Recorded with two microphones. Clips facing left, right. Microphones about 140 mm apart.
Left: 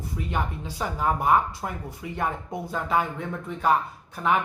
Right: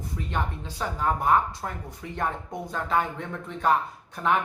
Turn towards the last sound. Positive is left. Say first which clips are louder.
# left 1 dB
turn(degrees=5)  # may be behind; listen again after turning